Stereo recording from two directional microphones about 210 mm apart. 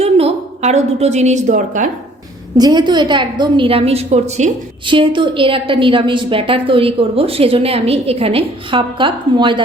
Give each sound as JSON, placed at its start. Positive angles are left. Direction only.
{"t": 0.0, "sound": "a woman's voice", "side_deg": -30}
{"t": 2.6, "sound": "a woman's voice", "side_deg": -20}